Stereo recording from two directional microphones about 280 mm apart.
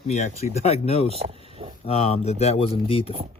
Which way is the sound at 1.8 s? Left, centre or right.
Left.